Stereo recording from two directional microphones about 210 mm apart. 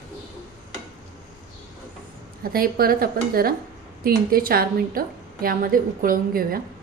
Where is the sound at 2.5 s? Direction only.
45° right (ahead or behind).